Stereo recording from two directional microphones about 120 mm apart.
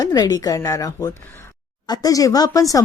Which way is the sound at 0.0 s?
30° left (ahead or behind).